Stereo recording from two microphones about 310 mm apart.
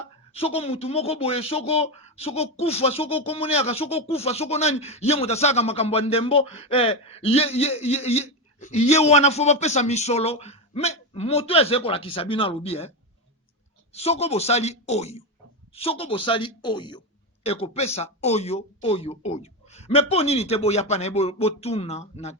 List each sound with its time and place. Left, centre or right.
0.3 s speech: centre
13.9 s a woman's voice: centre